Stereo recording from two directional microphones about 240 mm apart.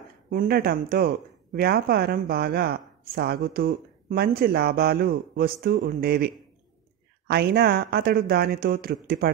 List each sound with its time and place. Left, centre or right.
0.3 s speech: right